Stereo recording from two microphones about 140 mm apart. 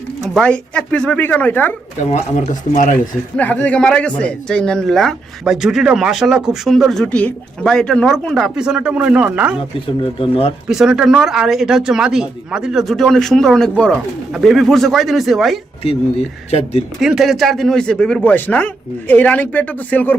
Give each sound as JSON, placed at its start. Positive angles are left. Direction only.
{"t": 0.2, "sound": "speech", "side_deg": 5}
{"t": 2.0, "sound": "speech", "side_deg": 55}
{"t": 3.3, "sound": "speech", "side_deg": 10}
{"t": 10.0, "sound": "speech", "side_deg": 40}
{"t": 10.7, "sound": "speech", "side_deg": -5}
{"t": 15.8, "sound": "speech", "side_deg": 45}
{"t": 17.0, "sound": "speech", "side_deg": 0}